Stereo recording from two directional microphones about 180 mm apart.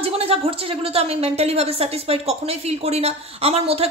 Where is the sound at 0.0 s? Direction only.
30° right (ahead or behind).